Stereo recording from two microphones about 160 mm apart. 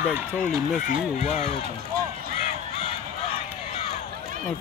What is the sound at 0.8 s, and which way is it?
Speech, 50° left (ahead or behind).